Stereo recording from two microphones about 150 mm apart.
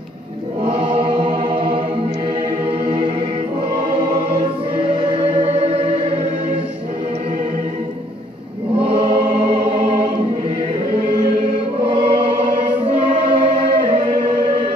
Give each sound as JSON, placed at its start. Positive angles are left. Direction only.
{"t": 0.7, "sound": "music", "side_deg": -40}
{"t": 4.4, "sound": "choir", "side_deg": -40}
{"t": 8.7, "sound": "choir", "side_deg": -40}
{"t": 11.8, "sound": "choir", "side_deg": -40}
{"t": 12.8, "sound": "chant", "side_deg": -40}